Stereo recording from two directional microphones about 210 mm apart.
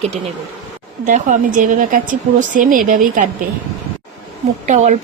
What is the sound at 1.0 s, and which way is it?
Speech, 35° right (ahead or behind).